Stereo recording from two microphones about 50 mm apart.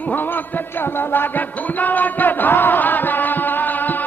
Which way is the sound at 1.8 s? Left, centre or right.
Left.